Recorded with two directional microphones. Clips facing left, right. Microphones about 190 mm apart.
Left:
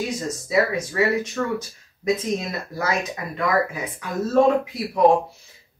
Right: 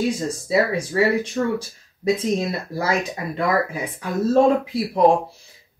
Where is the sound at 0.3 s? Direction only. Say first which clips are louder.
Right 1 dB; 30° right (ahead or behind).